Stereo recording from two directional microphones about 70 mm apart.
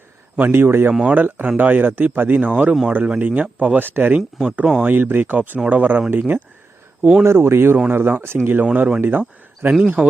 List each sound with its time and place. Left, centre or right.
0.3 s a man's voice: right
3.8 s speech: right
4.4 s speech: centre
4.8 s speech: right
7.3 s a man's voice: right; by 10.1 s centre